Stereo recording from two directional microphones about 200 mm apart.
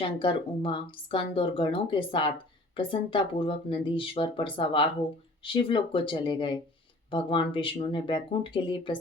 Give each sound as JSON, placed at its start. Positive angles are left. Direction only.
{"t": 0.0, "sound": "speech", "side_deg": 25}